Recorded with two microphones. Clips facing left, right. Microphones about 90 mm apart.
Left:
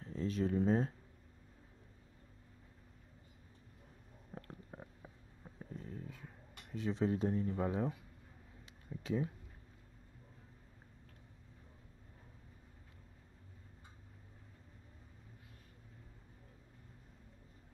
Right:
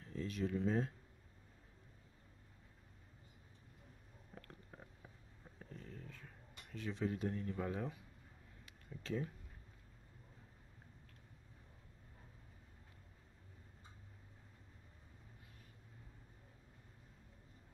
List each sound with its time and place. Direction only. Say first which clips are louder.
0.0 s speech: left 5 dB; 30° left (ahead or behind)
4.4 s a sound: left 6 dB; 20° left (ahead or behind)
6.9 s speech: left 6 dB; 25° left (ahead or behind)
9.0 s speech: left 5 dB; 10° left (ahead or behind)